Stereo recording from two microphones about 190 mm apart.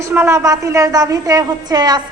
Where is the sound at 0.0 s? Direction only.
15° right (ahead or behind).